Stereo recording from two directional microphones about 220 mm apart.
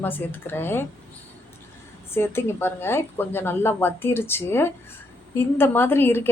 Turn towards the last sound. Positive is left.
turn(degrees=10)  # may be behind; listen again after turning